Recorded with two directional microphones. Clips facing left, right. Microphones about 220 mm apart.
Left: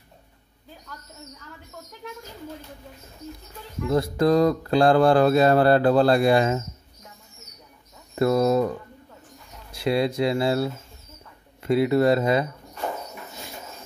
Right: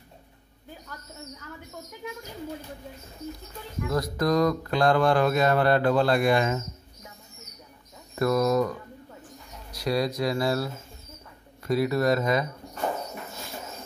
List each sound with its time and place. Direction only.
3.9 s speech: 30° left (ahead or behind)
8.2 s speech: 30° left (ahead or behind)